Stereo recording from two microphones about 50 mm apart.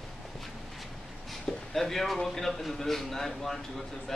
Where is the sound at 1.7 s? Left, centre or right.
Centre.